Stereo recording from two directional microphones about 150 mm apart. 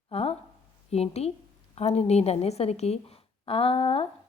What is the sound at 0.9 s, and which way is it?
A woman's voice, 45° left (ahead or behind).